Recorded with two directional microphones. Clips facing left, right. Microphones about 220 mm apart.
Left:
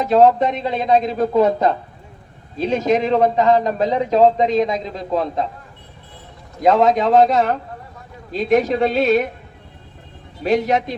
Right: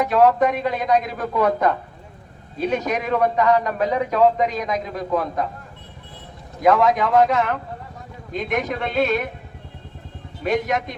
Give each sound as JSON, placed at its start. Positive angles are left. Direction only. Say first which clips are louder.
{"t": 0.0, "sound": "a man's voice", "louder": "left 3 dB", "side_deg": 25}
{"t": 6.6, "sound": "a man's voice", "louder": "left 2 dB", "side_deg": 25}
{"t": 10.4, "sound": "a man's voice", "louder": "left 4 dB", "side_deg": 35}